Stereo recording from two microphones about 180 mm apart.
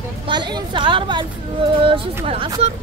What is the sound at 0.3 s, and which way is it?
Speech, 25° right (ahead or behind).